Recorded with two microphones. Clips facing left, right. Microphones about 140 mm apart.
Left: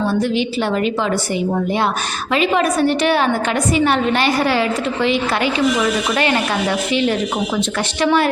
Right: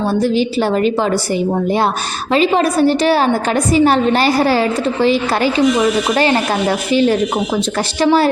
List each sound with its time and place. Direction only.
0.1 s a woman's voice: 35° right (ahead or behind)
2.3 s a woman's voice: 35° right (ahead or behind)